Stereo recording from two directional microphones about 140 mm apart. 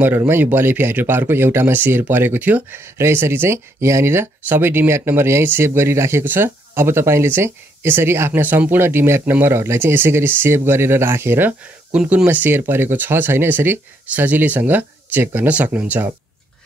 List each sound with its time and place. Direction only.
0.0 s speech: 15° right (ahead or behind)